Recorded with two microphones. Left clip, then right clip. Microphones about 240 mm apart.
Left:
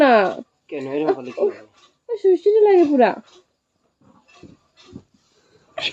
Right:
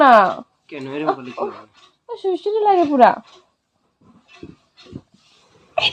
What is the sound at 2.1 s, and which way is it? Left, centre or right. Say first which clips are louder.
Speech: left 5 dB; centre.